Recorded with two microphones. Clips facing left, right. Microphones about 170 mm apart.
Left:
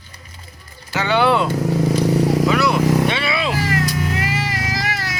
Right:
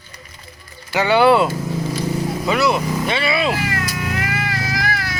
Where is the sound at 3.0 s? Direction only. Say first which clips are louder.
Right 1 dB; centre (ahead or behind).